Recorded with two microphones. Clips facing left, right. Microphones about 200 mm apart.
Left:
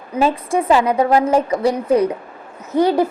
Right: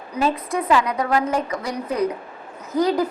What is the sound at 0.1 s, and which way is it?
A woman's voice, 25° left (ahead or behind).